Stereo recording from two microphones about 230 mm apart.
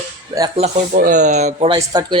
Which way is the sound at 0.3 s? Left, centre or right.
Right.